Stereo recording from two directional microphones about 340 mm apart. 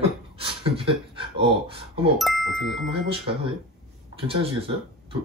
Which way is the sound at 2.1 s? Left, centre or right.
Centre.